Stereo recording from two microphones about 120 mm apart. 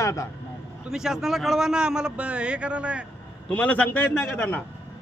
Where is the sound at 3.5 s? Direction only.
10° left (ahead or behind).